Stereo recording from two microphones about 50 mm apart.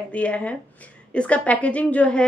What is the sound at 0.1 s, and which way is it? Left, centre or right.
A woman's voice, left.